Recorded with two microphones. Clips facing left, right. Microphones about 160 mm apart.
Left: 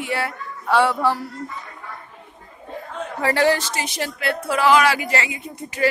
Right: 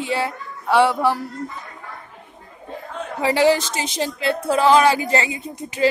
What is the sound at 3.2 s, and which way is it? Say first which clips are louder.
Speech: right 2 dB; 15° right (ahead or behind).